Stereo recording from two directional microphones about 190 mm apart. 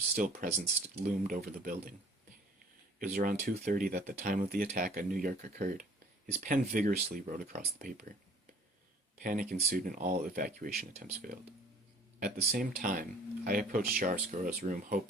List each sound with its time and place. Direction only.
0.4 s speech: 45° right (ahead or behind)
3.0 s speech: 45° right (ahead or behind)
9.2 s speech: 45° right (ahead or behind)
12.5 s speech: 45° right (ahead or behind)